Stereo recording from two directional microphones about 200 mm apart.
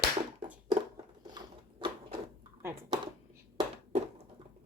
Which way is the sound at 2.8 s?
25° right (ahead or behind).